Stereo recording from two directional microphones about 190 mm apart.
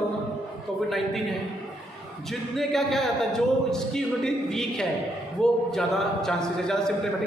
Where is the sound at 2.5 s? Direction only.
Centre (ahead or behind).